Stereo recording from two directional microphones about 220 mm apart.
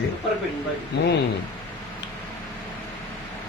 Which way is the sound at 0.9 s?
50° left (ahead or behind).